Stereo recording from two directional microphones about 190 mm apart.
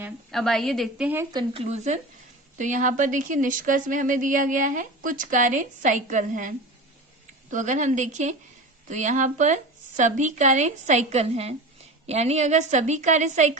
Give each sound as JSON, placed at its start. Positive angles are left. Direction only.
{"t": 0.3, "sound": "a woman's voice", "side_deg": 0}
{"t": 1.6, "sound": "a woman's voice", "side_deg": -35}
{"t": 7.5, "sound": "a woman's voice", "side_deg": -40}